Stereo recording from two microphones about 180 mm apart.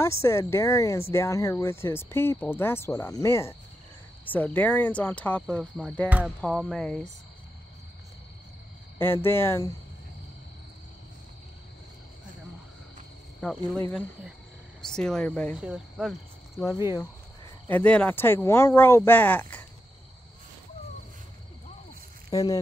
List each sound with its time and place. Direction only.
0.0 s speech: 15° left (ahead or behind)
6.0 s a sound: 5° right (ahead or behind)
6.4 s speech: centre (ahead or behind)
8.9 s speech: 15° left (ahead or behind)
13.7 s speech: 15° left (ahead or behind)
15.5 s speech: 5° right (ahead or behind)
17.6 s speech: 10° left (ahead or behind)
22.3 s speech: 20° left (ahead or behind)